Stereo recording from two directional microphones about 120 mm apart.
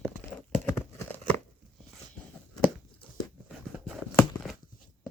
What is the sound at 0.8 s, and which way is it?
Crumpling, 15° left (ahead or behind).